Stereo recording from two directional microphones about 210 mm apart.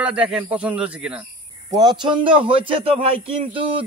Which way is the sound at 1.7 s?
20° right (ahead or behind).